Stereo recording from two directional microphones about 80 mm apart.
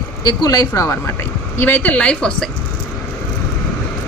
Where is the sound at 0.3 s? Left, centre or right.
Left.